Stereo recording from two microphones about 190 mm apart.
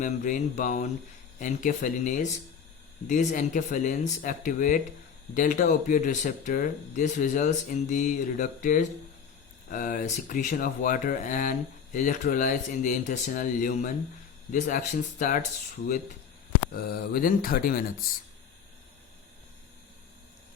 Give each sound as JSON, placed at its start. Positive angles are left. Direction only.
{"t": 0.0, "sound": "speech", "side_deg": 40}
{"t": 16.7, "sound": "speech", "side_deg": 50}